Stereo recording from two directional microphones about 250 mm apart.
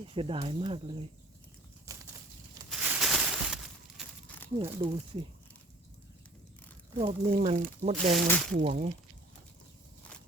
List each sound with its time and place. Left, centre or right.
0.1 s speech: right
1.9 s bird flight: centre
2.6 s a sound: centre
4.5 s speech: centre
6.9 s speech: right
8.1 s speech: centre
8.6 s speech: right